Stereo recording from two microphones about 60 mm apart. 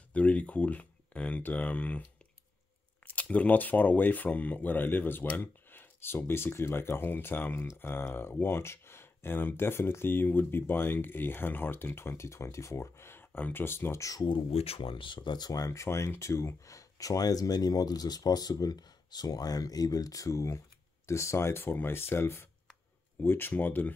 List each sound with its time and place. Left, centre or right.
0.1 s speech: left
3.1 s speech: left
13.2 s speech: left
15.4 s speech: left
21.1 s speech: left